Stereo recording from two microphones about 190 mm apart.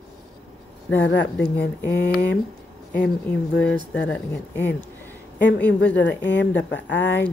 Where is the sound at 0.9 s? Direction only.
65° left (ahead or behind).